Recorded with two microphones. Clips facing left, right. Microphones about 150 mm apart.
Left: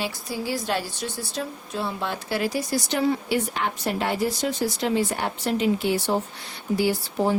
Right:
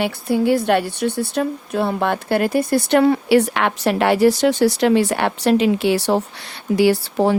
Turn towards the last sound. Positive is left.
turn(degrees=-75)  # may be behind; listen again after turning